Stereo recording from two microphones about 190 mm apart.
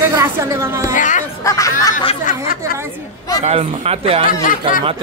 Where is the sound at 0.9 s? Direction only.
40° left (ahead or behind).